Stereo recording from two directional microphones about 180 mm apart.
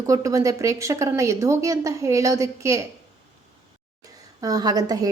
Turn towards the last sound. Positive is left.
turn(degrees=-20)  # may be behind; listen again after turning